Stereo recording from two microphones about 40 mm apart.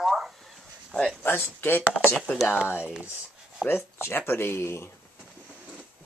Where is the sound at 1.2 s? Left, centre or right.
Left.